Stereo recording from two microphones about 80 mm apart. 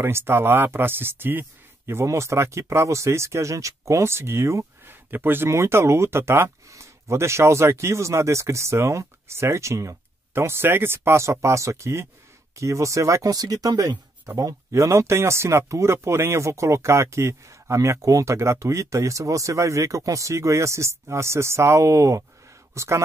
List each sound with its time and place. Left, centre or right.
0.0 s speech: right